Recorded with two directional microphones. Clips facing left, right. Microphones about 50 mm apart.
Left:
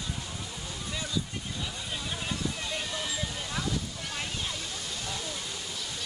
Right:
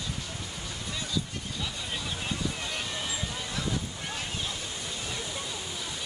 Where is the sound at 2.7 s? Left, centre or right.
Right.